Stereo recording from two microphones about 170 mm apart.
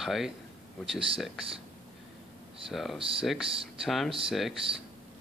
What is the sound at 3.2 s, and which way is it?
Speech, centre (ahead or behind).